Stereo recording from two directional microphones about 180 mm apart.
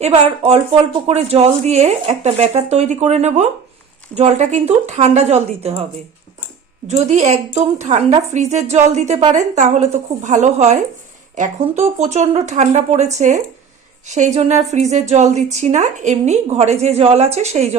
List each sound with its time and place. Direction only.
0.0 s a woman's voice: 35° right (ahead or behind)
6.8 s a woman's voice: 40° right (ahead or behind)